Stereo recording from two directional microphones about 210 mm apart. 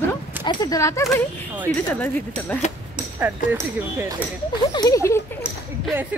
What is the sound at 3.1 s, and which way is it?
Speech, 10° right (ahead or behind).